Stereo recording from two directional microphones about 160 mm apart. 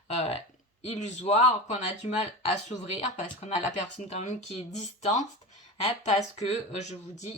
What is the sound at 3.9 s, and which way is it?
Speech, 45° left (ahead or behind).